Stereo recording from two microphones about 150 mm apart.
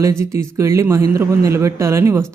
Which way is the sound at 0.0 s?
20° right (ahead or behind).